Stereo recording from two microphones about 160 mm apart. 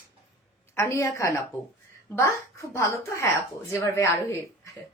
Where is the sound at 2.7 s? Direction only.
15° left (ahead or behind).